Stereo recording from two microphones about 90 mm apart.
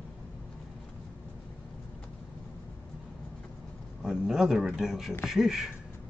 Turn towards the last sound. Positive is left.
turn(degrees=-5)  # may be behind; listen again after turning